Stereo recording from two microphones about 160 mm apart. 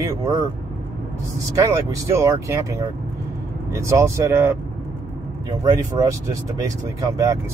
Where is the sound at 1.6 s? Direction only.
20° right (ahead or behind).